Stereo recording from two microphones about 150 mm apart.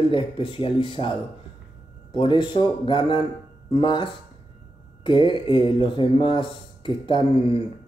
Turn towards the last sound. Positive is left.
turn(degrees=35)  # may be behind; listen again after turning